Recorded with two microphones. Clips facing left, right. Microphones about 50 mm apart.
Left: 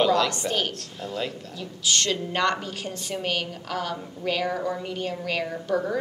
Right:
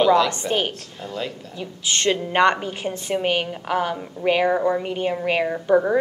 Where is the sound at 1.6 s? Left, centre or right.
Right.